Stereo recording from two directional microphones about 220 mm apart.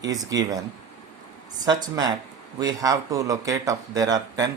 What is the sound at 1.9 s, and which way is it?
Speech, 20° right (ahead or behind).